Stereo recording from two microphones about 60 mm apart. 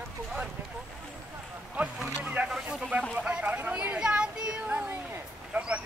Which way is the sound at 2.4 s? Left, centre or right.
Centre.